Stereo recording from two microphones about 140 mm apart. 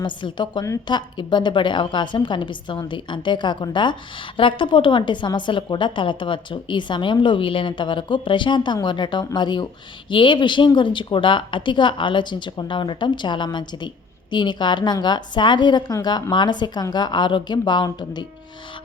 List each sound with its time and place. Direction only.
0.0 s a woman's voice: 35° left (ahead or behind)